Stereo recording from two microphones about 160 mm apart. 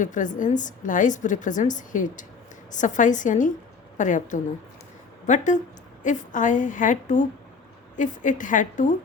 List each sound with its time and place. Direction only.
0.0 s a woman's voice: 50° left (ahead or behind)